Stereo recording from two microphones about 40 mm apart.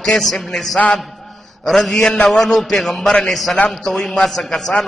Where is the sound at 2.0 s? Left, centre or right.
Centre.